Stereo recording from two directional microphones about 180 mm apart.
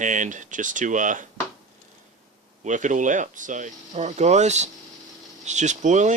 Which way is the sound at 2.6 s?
45° right (ahead or behind).